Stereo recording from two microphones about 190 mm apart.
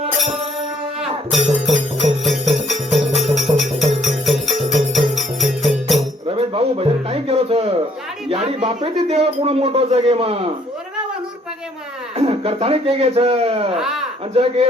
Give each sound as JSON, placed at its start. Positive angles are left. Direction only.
{"t": 1.3, "sound": "music", "side_deg": 0}
{"t": 6.2, "sound": "a sound", "side_deg": -30}
{"t": 8.3, "sound": "speech", "side_deg": -30}
{"t": 12.1, "sound": "speech", "side_deg": -30}